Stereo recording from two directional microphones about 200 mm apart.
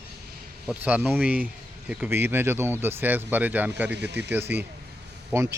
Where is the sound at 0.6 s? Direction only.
5° right (ahead or behind).